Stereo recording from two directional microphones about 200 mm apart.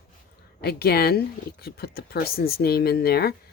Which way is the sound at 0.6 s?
50° left (ahead or behind).